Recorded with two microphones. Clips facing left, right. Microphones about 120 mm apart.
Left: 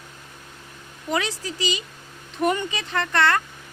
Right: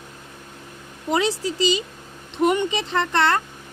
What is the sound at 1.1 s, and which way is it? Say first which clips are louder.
Speech: right 5 dB; 25° right (ahead or behind).